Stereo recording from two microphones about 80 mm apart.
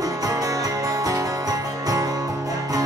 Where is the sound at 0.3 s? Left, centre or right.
Right.